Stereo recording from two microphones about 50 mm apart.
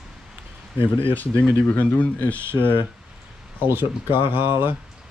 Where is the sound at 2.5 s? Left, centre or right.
Right.